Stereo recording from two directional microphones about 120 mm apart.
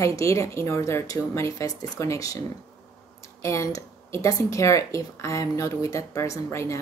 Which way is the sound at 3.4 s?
25° left (ahead or behind).